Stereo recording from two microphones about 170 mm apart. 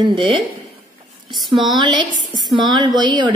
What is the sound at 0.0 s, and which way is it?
Speech, 30° right (ahead or behind).